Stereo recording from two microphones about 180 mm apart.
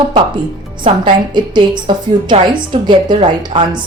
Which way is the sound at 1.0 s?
25° right (ahead or behind).